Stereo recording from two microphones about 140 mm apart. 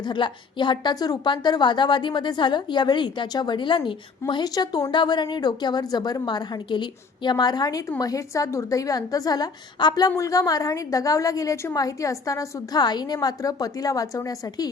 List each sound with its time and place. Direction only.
0.1 s a woman's voice: 35° left (ahead or behind)